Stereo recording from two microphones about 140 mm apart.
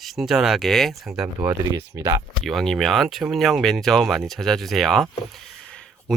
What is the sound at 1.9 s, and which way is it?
Speech, 25° right (ahead or behind).